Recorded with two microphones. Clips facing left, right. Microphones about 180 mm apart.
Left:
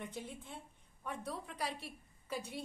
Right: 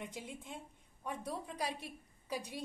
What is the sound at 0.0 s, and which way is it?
A woman's voice, 10° right (ahead or behind).